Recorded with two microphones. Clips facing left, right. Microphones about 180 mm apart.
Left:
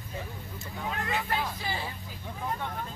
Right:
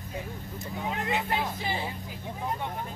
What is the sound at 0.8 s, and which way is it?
Speech, 20° right (ahead or behind).